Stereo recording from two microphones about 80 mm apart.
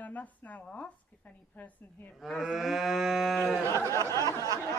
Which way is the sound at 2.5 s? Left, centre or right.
Centre.